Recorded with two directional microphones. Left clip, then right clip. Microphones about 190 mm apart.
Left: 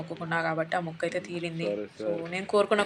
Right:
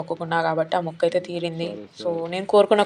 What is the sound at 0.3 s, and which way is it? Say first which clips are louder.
Speech: right 6 dB; 20° right (ahead or behind).